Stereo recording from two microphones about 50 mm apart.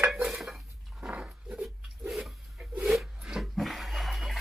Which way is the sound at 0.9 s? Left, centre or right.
Right.